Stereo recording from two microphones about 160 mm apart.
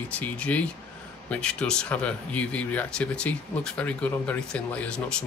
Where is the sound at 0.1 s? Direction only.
10° left (ahead or behind).